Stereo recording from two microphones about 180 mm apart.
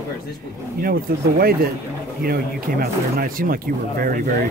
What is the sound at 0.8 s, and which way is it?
Speech, 55° right (ahead or behind).